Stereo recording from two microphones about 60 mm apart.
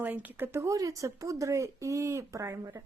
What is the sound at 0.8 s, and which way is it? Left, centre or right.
Speech, right.